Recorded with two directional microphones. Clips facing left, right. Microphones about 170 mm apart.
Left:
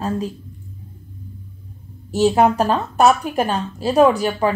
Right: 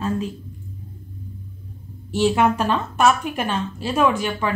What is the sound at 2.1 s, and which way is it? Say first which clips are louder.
A woman's voice: left 3 dB; 40° left (ahead or behind).